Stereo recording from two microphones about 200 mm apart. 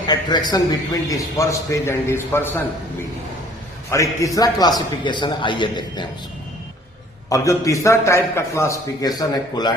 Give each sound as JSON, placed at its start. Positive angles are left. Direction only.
{"t": 0.1, "sound": "a man's voice", "side_deg": 20}
{"t": 3.9, "sound": "a man's voice", "side_deg": 15}
{"t": 7.3, "sound": "a man's voice", "side_deg": 15}